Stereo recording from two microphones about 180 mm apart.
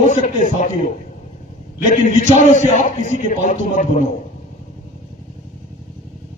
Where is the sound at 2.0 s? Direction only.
40° left (ahead or behind).